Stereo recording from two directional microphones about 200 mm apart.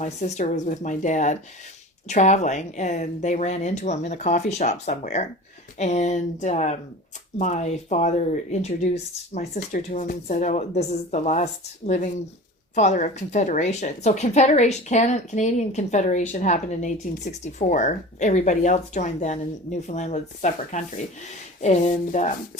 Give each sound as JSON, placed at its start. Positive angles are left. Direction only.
{"t": 0.0, "sound": "speech", "side_deg": 35}